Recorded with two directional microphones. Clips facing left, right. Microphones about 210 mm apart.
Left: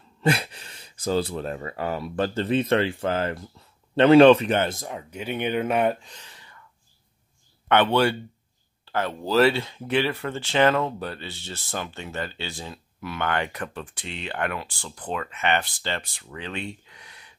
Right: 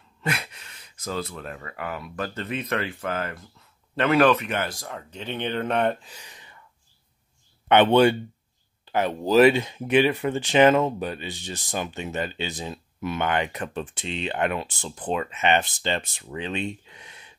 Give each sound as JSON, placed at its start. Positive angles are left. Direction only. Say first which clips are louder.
{"t": 0.2, "sound": "speech", "louder": "left 7 dB", "side_deg": 30}
{"t": 7.6, "sound": "speech", "louder": "right 3 dB", "side_deg": -20}